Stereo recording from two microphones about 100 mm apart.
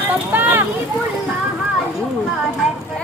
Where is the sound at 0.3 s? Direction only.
20° right (ahead or behind).